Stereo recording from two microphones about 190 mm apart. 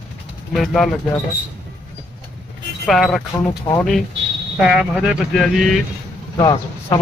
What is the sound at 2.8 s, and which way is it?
Speech, centre (ahead or behind).